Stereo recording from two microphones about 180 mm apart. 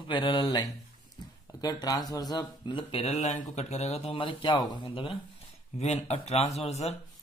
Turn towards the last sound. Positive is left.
turn(degrees=35)  # may be behind; listen again after turning